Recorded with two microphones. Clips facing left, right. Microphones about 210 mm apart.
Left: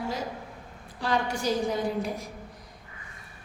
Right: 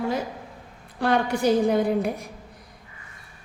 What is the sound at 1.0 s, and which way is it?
A woman's voice, 60° right (ahead or behind).